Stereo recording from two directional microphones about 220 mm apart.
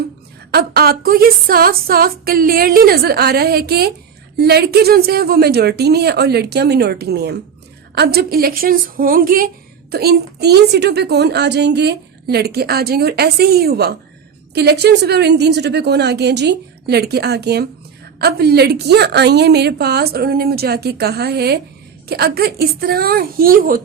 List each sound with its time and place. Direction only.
0.5 s a woman's voice: 45° right (ahead or behind)